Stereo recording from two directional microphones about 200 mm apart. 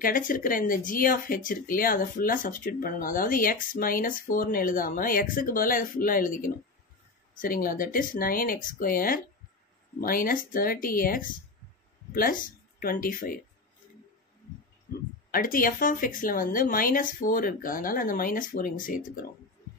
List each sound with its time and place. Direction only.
0.0 s speech: 45° left (ahead or behind)
15.3 s speech: 45° left (ahead or behind)